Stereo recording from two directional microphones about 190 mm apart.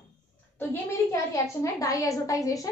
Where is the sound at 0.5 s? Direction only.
15° left (ahead or behind).